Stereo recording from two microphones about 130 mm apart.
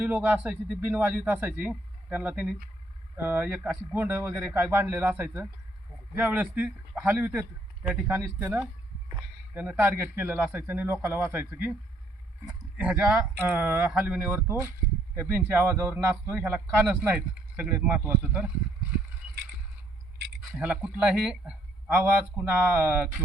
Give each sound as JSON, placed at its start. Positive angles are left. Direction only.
{"t": 0.0, "sound": "a man's voice", "side_deg": -10}
{"t": 9.6, "sound": "a man's voice", "side_deg": -15}
{"t": 12.7, "sound": "a man's voice", "side_deg": -10}
{"t": 20.5, "sound": "a man's voice", "side_deg": -10}
{"t": 22.7, "sound": "a man's voice", "side_deg": -15}